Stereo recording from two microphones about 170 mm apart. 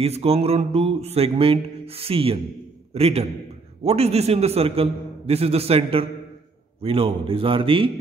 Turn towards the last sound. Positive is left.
turn(degrees=-30)  # may be behind; listen again after turning